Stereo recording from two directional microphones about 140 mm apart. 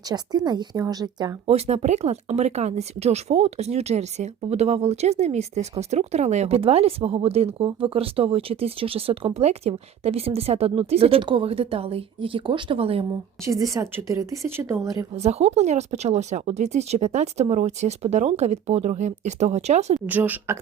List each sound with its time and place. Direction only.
0.1 s a woman's voice: 30° right (ahead or behind)
1.5 s speech: 45° right (ahead or behind)
13.4 s a woman's voice: 25° right (ahead or behind)
15.1 s speech: 50° right (ahead or behind)
20.1 s speech: 10° right (ahead or behind)